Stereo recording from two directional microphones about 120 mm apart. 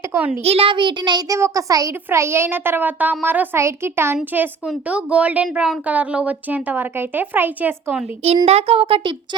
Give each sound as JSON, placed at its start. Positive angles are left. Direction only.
{"t": 0.1, "sound": "a child's voice", "side_deg": -15}
{"t": 0.4, "sound": "a child's voice", "side_deg": -55}
{"t": 1.4, "sound": "a child's voice", "side_deg": -25}
{"t": 8.4, "sound": "speech", "side_deg": -55}